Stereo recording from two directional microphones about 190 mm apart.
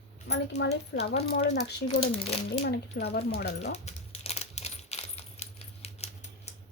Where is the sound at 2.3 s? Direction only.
60° left (ahead or behind).